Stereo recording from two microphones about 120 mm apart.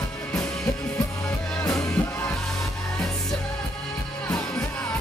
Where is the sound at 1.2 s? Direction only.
10° left (ahead or behind).